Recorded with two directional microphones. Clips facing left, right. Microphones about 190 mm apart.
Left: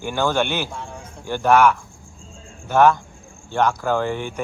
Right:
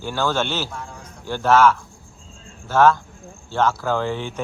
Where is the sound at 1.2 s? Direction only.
15° left (ahead or behind).